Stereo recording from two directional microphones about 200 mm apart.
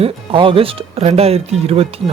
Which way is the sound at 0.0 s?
25° right (ahead or behind).